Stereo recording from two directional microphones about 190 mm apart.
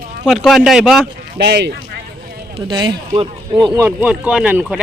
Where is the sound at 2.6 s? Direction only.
25° right (ahead or behind).